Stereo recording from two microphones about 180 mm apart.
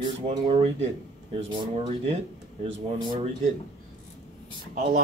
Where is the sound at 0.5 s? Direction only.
35° right (ahead or behind).